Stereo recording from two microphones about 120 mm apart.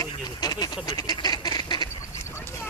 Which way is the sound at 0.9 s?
35° left (ahead or behind).